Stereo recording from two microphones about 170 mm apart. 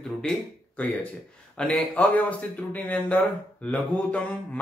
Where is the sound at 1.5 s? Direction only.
5° left (ahead or behind).